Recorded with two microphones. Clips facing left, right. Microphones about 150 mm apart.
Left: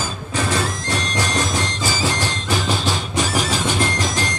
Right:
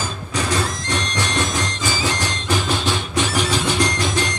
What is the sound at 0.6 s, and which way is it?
Music, 35° left (ahead or behind).